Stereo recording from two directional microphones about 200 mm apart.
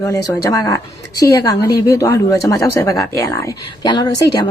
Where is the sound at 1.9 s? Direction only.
15° left (ahead or behind).